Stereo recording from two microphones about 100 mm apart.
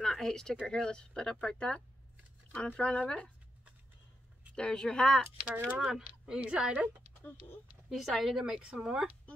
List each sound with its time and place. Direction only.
0.0 s speech: 5° left (ahead or behind)
4.6 s speech: 10° left (ahead or behind)
5.4 s speech: 15° right (ahead or behind)